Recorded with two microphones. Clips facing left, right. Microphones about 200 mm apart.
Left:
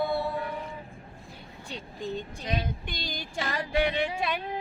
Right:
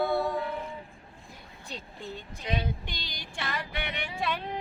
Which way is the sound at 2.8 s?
50° left (ahead or behind).